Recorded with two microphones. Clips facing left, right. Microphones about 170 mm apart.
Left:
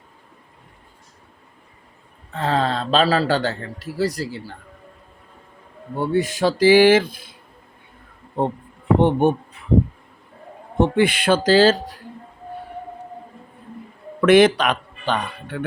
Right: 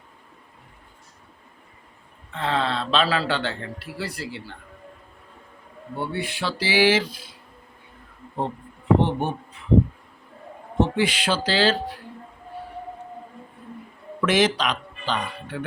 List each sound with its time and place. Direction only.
2.3 s a man's voice: 40° left (ahead or behind)
6.0 s speech: 40° left (ahead or behind)
9.0 s speech: 55° left (ahead or behind)
10.8 s speech: 55° left (ahead or behind)
14.2 s speech: 60° left (ahead or behind)